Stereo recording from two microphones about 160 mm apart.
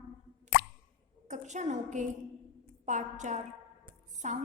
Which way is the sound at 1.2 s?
50° right (ahead or behind).